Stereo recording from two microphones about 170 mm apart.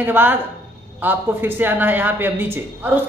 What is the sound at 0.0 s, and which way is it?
Speech, 10° right (ahead or behind).